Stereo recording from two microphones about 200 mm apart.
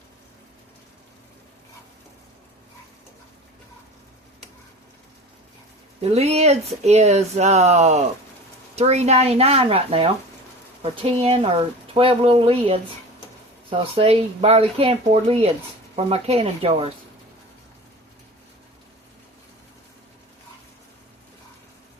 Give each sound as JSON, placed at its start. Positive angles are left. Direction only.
{"t": 6.0, "sound": "speech", "side_deg": -30}